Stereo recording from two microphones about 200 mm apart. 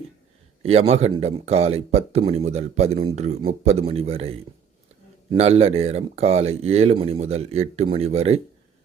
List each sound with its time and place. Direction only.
0.6 s speech: 30° right (ahead or behind)